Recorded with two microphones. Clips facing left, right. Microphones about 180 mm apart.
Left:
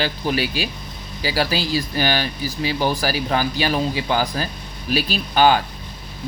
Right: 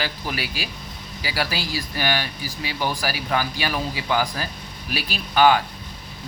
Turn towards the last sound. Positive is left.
turn(degrees=30)  # may be behind; listen again after turning